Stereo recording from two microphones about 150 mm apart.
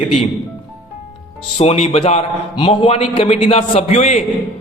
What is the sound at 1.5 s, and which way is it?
A man's voice, 45° left (ahead or behind).